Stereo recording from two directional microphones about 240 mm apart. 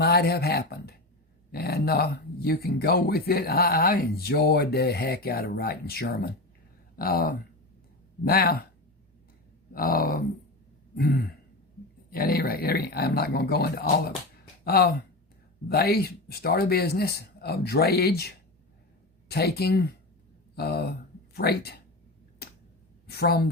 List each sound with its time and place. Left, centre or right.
0.0 s speech: left
9.7 s speech: left
19.3 s speech: left
23.0 s a woman's voice: left